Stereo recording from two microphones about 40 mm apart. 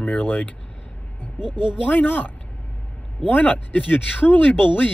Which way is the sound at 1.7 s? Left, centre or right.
Left.